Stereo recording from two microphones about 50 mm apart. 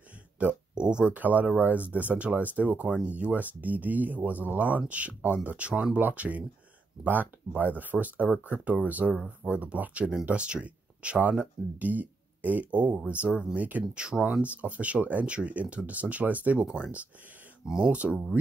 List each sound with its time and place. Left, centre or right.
0.4 s speech: right
13.9 s speech: centre
14.3 s speech: right
16.6 s speech: centre